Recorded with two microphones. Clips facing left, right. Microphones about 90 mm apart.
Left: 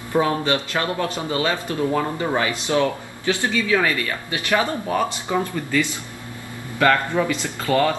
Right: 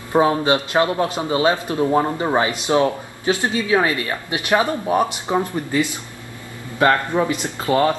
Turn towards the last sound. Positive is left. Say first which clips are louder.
# right 2 dB
turn(degrees=-25)  # may be behind; listen again after turning